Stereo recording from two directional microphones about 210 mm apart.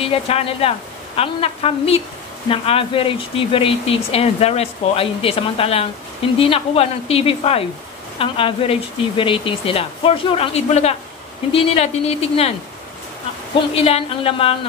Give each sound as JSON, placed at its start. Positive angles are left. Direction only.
{"t": 0.0, "sound": "speech", "side_deg": 25}
{"t": 13.6, "sound": "speech", "side_deg": 25}